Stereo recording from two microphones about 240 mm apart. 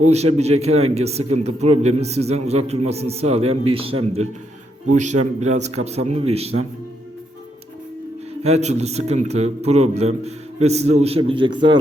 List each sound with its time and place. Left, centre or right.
0.0 s a man's voice: right
8.4 s a man's voice: right